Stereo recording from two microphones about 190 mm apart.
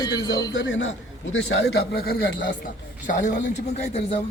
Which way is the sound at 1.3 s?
90° left.